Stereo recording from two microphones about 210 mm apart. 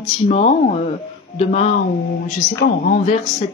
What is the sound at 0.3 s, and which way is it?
Speech, 35° left (ahead or behind).